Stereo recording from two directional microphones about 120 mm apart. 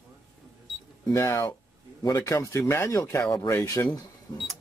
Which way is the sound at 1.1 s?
25° left (ahead or behind).